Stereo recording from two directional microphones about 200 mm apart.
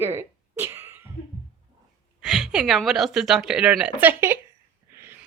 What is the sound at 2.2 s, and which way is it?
A woman's voice, centre (ahead or behind).